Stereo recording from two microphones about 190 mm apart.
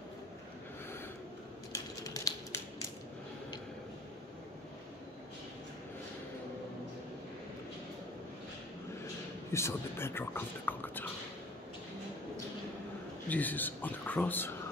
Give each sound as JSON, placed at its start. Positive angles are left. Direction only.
{"t": 1.7, "sound": "typing", "side_deg": 15}
{"t": 9.5, "sound": "speech", "side_deg": 15}
{"t": 13.3, "sound": "speech", "side_deg": 10}